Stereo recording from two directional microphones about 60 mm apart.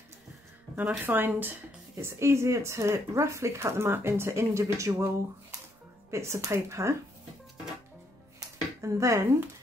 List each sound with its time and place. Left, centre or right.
0.7 s a woman's voice: right
2.0 s speech: right
4.4 s speech: right
8.8 s speech: right